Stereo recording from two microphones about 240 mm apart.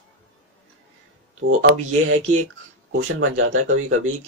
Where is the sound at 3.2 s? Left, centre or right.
Right.